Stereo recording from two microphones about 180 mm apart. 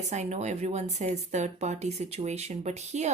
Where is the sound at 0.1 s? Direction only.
40° right (ahead or behind).